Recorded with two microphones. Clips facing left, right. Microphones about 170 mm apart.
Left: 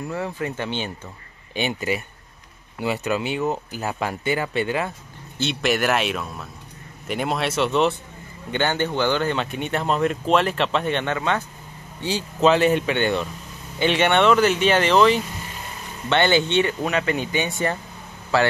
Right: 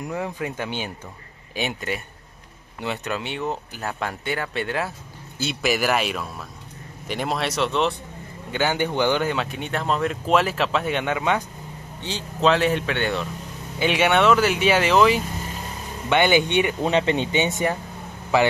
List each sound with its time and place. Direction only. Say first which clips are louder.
0.0 s speech: left 1 dB; 15° right (ahead or behind)
12.0 s speech: left 3 dB; 5° left (ahead or behind); by 16.7 s 15° right (ahead or behind)
16.8 s speech: right 2 dB; 25° right (ahead or behind)